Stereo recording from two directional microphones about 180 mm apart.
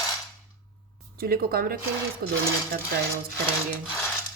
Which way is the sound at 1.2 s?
55° right (ahead or behind).